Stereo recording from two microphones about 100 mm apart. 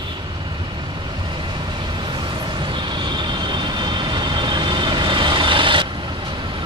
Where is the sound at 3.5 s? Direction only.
50° right (ahead or behind).